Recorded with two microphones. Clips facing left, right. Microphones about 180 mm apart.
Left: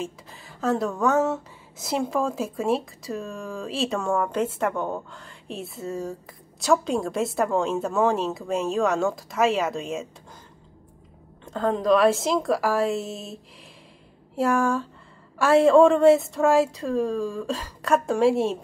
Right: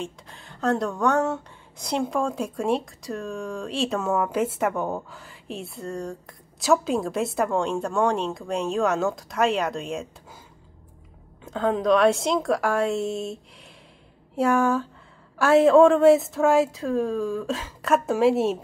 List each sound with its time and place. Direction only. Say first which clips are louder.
0.0 s speech: left 1 dB; centre (ahead or behind)
11.4 s speech: even; centre (ahead or behind)